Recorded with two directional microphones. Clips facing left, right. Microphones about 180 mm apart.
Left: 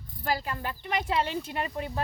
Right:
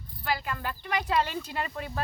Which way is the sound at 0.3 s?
35° left (ahead or behind).